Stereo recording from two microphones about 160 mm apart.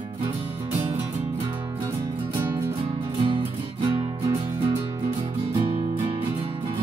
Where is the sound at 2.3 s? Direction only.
15° right (ahead or behind).